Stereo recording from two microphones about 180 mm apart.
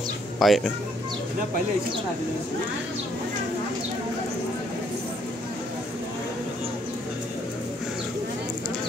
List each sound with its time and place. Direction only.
0.4 s speech: centre (ahead or behind)